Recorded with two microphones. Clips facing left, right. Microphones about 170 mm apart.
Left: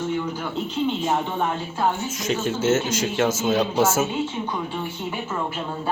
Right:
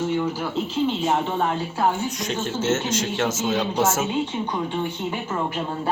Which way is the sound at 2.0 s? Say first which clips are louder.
Left 2 dB; centre (ahead or behind).